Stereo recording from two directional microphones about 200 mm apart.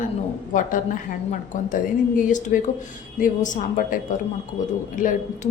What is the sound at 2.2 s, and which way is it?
A woman's voice, 40° left (ahead or behind).